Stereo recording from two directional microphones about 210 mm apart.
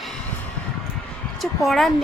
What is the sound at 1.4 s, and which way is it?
Speech, centre (ahead or behind).